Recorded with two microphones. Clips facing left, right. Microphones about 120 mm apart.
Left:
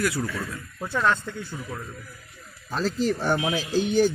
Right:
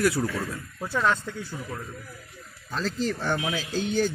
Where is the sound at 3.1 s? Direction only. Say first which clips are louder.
Left 3 dB; 15° left (ahead or behind).